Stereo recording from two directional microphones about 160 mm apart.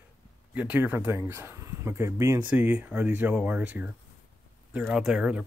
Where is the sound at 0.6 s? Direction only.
10° right (ahead or behind).